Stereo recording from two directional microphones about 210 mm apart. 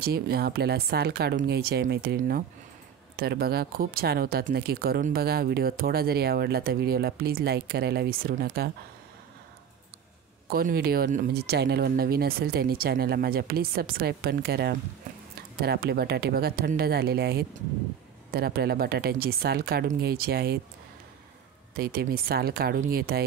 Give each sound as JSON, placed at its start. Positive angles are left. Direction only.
{"t": 0.0, "sound": "speech", "side_deg": -45}
{"t": 10.5, "sound": "speech", "side_deg": -45}
{"t": 21.7, "sound": "speech", "side_deg": -45}